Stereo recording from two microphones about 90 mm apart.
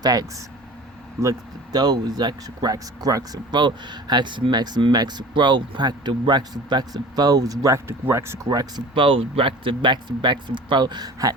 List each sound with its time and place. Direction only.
0.0 s speech: 45° right (ahead or behind)
1.7 s speech: 50° right (ahead or behind)
3.5 s speech: 55° right (ahead or behind); by 7.8 s 40° right (ahead or behind)
7.9 s speech: 30° right (ahead or behind)
8.4 s speech: 45° right (ahead or behind)
9.0 s speech: 80° right; by 11.3 s 45° right (ahead or behind)